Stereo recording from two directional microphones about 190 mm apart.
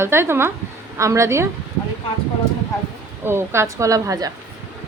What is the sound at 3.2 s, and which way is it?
A woman's voice, 15° right (ahead or behind).